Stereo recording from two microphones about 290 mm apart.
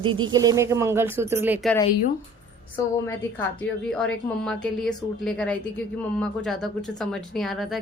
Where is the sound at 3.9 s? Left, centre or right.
Centre.